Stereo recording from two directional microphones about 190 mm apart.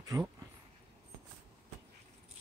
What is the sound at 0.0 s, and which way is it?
Speech, 20° right (ahead or behind).